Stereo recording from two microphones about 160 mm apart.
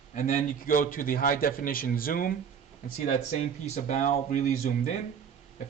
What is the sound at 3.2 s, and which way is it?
Speech, 45° left (ahead or behind).